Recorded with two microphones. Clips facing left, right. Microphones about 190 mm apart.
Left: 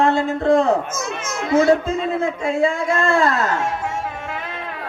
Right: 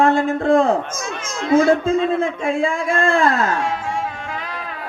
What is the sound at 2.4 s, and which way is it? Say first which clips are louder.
Speech: left 1 dB; 50° right (ahead or behind).